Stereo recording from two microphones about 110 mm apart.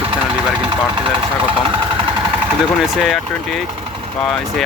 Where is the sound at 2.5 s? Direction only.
5° right (ahead or behind).